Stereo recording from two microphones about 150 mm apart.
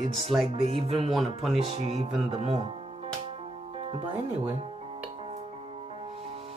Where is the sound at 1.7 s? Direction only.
45° right (ahead or behind).